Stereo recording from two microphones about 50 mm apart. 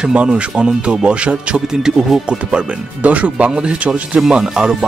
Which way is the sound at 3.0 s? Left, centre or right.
Right.